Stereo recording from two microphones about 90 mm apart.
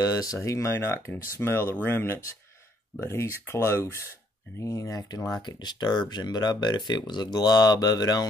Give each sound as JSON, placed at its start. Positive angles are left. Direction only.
{"t": 0.0, "sound": "speech", "side_deg": 40}